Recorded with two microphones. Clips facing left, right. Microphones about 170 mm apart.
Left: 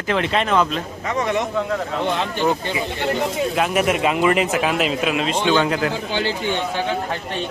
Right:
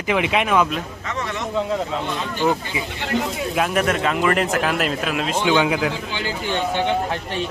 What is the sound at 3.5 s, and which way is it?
A man's voice, 5° left (ahead or behind).